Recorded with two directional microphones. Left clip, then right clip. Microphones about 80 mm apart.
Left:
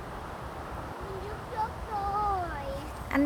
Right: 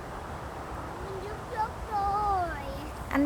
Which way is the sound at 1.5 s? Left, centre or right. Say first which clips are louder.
Right 2 dB; left.